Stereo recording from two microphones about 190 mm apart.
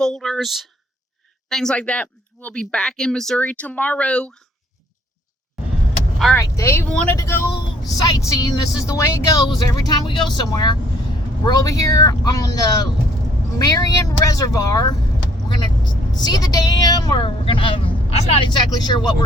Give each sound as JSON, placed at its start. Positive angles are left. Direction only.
{"t": 0.0, "sound": "speech", "side_deg": 5}
{"t": 6.3, "sound": "a woman's voice", "side_deg": 15}